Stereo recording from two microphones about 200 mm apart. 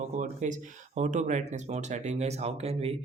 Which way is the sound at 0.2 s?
40° right (ahead or behind).